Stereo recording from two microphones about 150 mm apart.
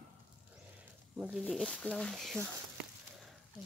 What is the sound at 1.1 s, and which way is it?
Speech, 5° right (ahead or behind).